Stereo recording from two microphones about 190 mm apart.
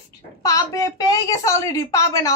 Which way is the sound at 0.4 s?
20° left (ahead or behind).